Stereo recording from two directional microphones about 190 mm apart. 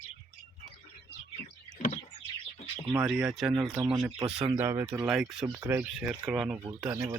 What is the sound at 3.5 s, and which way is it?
Speech, 10° right (ahead or behind).